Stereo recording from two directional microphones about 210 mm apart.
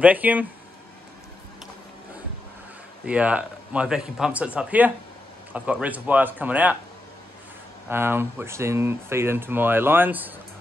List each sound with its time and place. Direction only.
0.0 s speech: 5° right (ahead or behind)
3.1 s speech: 5° right (ahead or behind)
7.9 s speech: 10° right (ahead or behind)